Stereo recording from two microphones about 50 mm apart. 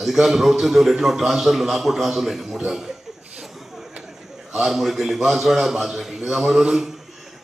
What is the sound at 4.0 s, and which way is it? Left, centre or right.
A man's voice, centre.